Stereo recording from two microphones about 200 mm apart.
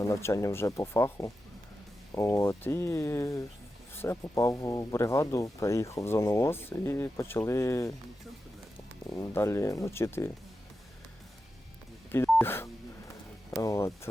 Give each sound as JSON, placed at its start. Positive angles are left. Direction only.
{"t": 0.0, "sound": "speech", "side_deg": 15}
{"t": 9.1, "sound": "speech", "side_deg": 15}
{"t": 12.1, "sound": "telephone dialing", "side_deg": 10}
{"t": 13.5, "sound": "speech", "side_deg": 15}